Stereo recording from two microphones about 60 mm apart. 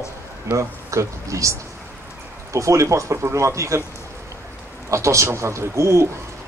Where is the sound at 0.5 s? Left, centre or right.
Right.